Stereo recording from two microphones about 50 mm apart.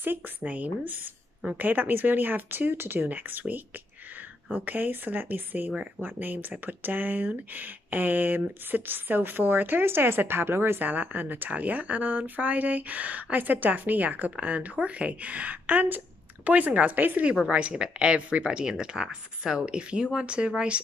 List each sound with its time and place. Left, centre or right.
0.4 s speech: right
10.8 s speech: right
17.3 s speech: right